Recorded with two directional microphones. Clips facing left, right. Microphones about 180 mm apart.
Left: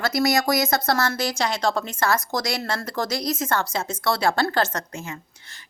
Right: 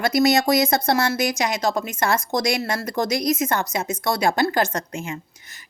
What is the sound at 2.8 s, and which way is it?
A woman's voice, 20° right (ahead or behind).